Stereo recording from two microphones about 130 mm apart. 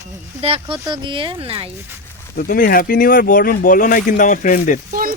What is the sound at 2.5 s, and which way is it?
Speech, 90° left.